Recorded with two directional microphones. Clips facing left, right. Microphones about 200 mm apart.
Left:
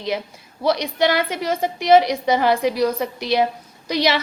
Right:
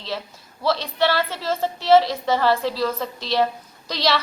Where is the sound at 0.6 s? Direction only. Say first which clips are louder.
Left 2 dB; 15° left (ahead or behind).